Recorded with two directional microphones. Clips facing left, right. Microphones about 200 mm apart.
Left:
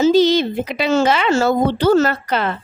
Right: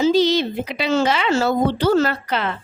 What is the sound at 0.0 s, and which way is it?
Speech, 50° left (ahead or behind).